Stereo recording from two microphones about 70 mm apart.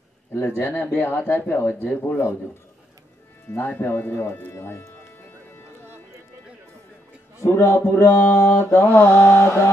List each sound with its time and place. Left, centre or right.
0.3 s speech: left
3.5 s speech: left
7.4 s speech: left
8.5 s mantra: left